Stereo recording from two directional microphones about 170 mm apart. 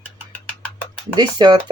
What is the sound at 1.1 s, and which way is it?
Speech, 25° right (ahead or behind).